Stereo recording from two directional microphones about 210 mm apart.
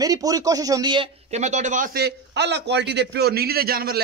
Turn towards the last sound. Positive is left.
turn(degrees=-45)  # may be behind; listen again after turning